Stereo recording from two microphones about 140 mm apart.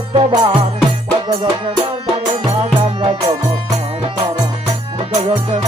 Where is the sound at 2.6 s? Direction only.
45° right (ahead or behind).